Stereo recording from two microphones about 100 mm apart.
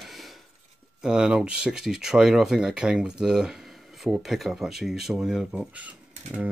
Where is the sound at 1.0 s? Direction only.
10° right (ahead or behind).